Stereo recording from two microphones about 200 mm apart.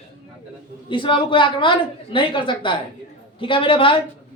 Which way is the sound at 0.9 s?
25° left (ahead or behind).